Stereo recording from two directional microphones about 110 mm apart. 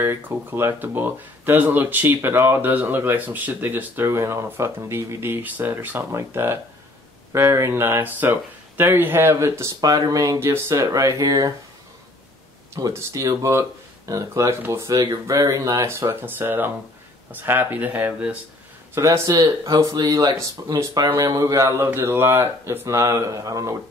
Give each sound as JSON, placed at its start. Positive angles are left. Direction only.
{"t": 0.0, "sound": "speech", "side_deg": -20}
{"t": 12.7, "sound": "speech", "side_deg": -30}
{"t": 18.9, "sound": "speech", "side_deg": -30}